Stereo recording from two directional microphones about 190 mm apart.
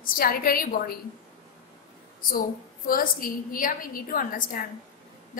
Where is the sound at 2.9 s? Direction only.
50° left (ahead or behind).